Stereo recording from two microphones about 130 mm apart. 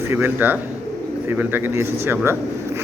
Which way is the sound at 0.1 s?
15° right (ahead or behind).